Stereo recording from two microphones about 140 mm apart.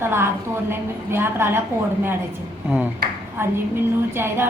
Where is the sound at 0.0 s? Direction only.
15° right (ahead or behind).